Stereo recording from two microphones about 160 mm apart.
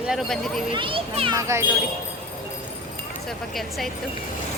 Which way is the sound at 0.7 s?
30° right (ahead or behind).